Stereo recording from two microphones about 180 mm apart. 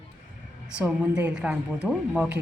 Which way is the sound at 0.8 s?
5° right (ahead or behind).